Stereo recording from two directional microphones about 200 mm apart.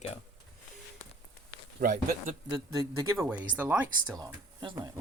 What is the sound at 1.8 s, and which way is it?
Speech, 35° right (ahead or behind).